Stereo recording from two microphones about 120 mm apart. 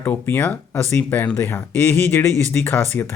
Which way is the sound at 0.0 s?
15° left (ahead or behind).